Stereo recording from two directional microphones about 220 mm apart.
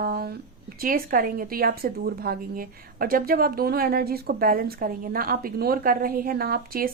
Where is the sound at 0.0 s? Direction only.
45° right (ahead or behind).